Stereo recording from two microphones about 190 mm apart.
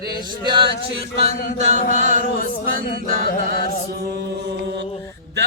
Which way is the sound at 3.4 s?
55° right (ahead or behind).